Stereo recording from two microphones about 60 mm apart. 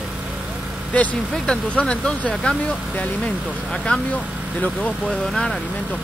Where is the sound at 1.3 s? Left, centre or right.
Centre.